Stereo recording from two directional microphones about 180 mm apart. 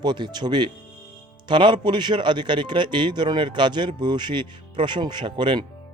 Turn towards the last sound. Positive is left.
turn(degrees=-25)  # may be behind; listen again after turning